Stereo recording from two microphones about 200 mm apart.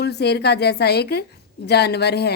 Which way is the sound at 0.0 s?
55° left (ahead or behind).